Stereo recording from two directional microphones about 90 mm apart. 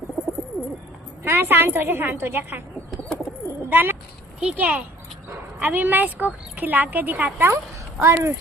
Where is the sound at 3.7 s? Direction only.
20° right (ahead or behind).